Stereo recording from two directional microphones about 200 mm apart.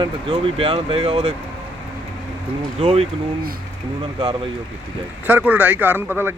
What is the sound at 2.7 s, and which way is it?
A man's voice, 30° right (ahead or behind).